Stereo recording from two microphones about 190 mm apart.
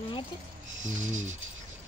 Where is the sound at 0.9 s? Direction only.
40° right (ahead or behind).